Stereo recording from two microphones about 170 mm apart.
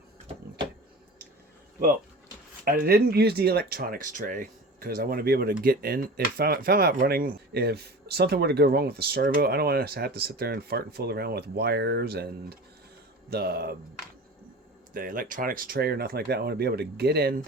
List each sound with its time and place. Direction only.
2.6 s speech: 60° right (ahead or behind)
14.9 s speech: 55° right (ahead or behind)